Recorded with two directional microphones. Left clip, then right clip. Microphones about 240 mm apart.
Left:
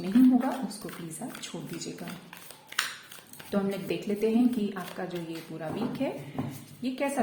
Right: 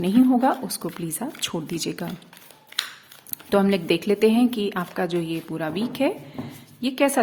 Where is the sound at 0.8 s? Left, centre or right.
Right.